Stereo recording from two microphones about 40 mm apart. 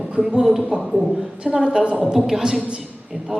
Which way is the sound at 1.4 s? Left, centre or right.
Right.